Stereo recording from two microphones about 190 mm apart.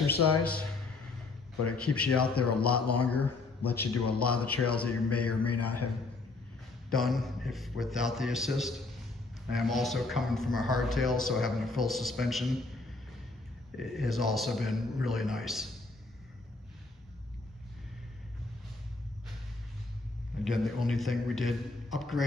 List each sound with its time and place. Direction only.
0.1 s a man's voice: 5° left (ahead or behind)
1.8 s a man's voice: 5° left (ahead or behind)
6.9 s speech: centre (ahead or behind)
13.7 s speech: centre (ahead or behind)
20.4 s speech: centre (ahead or behind)